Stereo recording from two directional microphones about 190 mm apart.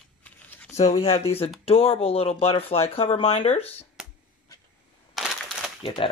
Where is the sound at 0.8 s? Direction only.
35° left (ahead or behind).